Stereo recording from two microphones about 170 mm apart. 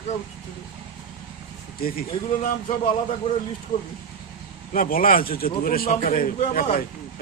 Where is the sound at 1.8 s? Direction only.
60° left (ahead or behind).